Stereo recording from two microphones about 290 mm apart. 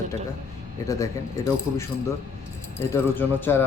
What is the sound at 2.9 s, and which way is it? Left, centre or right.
Speech, centre.